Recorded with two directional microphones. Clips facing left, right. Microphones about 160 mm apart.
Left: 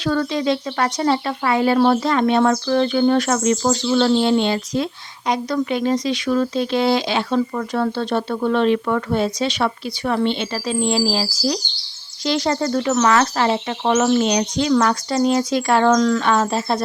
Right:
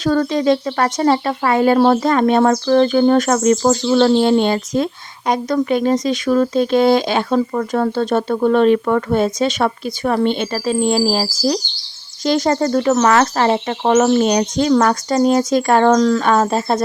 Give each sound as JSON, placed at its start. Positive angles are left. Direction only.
{"t": 0.0, "sound": "speech", "side_deg": -45}